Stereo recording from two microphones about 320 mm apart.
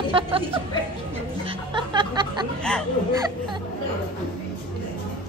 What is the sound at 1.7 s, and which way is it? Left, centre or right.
Music, centre.